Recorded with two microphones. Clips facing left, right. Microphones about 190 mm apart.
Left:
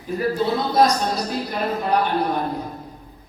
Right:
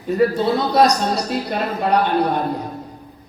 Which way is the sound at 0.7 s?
75° right (ahead or behind).